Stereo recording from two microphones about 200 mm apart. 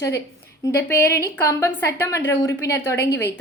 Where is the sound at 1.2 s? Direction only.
15° left (ahead or behind).